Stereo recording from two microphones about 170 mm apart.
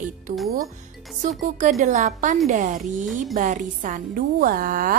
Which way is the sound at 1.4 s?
45° right (ahead or behind).